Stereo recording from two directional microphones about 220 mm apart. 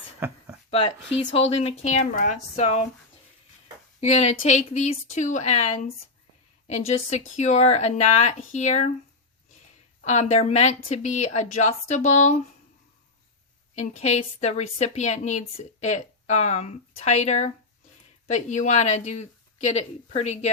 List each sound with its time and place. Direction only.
0.7 s speech: 25° left (ahead or behind)
4.0 s a woman's voice: 30° left (ahead or behind)
10.0 s a woman's voice: 30° left (ahead or behind)
13.7 s a woman's voice: 30° left (ahead or behind)